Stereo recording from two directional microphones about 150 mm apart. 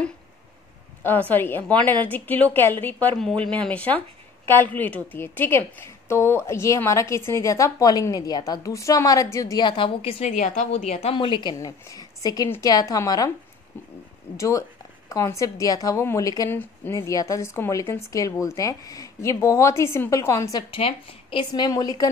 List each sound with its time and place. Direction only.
1.0 s a woman's voice: 15° left (ahead or behind); by 10.3 s 40° left (ahead or behind)
10.3 s a woman's voice: 55° left (ahead or behind); by 11.5 s 35° left (ahead or behind)
11.5 s a woman's voice: 20° left (ahead or behind)
14.3 s a woman's voice: 20° left (ahead or behind)
20.7 s a woman's voice: 40° left (ahead or behind)